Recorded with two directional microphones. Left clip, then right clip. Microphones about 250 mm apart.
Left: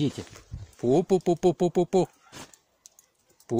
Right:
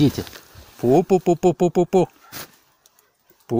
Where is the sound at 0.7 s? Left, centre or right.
Centre.